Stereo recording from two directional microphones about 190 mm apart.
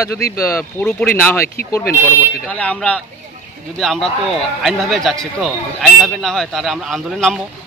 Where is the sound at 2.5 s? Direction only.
5° left (ahead or behind).